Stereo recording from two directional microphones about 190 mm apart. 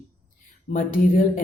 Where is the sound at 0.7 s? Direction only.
45° left (ahead or behind).